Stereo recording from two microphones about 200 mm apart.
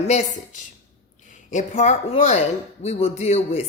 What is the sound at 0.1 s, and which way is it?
Speech, 35° left (ahead or behind).